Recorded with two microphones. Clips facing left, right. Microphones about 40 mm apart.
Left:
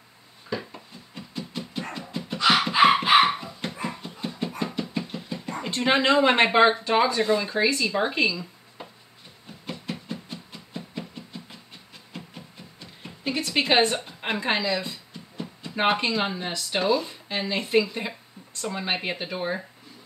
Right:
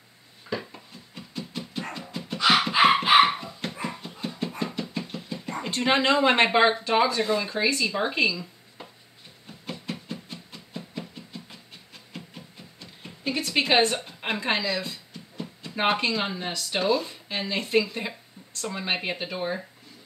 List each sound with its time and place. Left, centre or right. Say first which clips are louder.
0.5 s music: even; centre
9.5 s a sound: left 1 dB; centre
12.1 s speech: left 1 dB; centre